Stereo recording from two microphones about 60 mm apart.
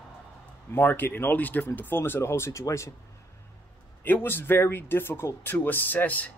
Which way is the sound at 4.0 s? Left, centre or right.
Left.